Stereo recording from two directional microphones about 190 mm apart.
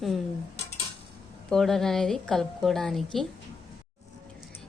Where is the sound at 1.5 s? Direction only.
Centre (ahead or behind).